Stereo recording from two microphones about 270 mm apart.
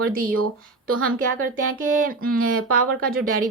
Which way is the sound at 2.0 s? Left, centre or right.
Right.